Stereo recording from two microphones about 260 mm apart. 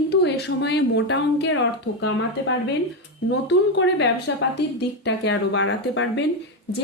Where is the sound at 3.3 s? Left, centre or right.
Left.